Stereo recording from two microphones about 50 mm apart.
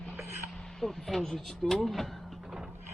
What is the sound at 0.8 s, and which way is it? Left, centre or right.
Speech, centre.